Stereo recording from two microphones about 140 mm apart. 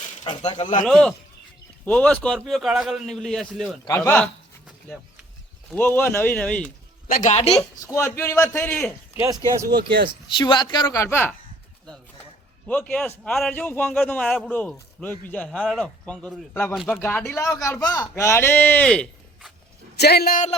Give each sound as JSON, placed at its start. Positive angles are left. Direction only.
{"t": 0.3, "sound": "speech", "side_deg": 35}
{"t": 0.6, "sound": "speech", "side_deg": 65}
{"t": 0.9, "sound": "a man's voice", "side_deg": 5}
{"t": 3.8, "sound": "a man's voice", "side_deg": 20}
{"t": 5.7, "sound": "a man's voice", "side_deg": 15}
{"t": 7.1, "sound": "speech", "side_deg": 65}
{"t": 7.8, "sound": "a man's voice", "side_deg": 20}
{"t": 9.1, "sound": "speech", "side_deg": -20}
{"t": 10.3, "sound": "speech", "side_deg": 35}
{"t": 11.0, "sound": "a man's voice", "side_deg": 15}
{"t": 12.6, "sound": "a man's voice", "side_deg": 10}
{"t": 16.7, "sound": "a man's voice", "side_deg": 0}
{"t": 17.0, "sound": "a man's voice", "side_deg": 15}
{"t": 20.2, "sound": "speech", "side_deg": 75}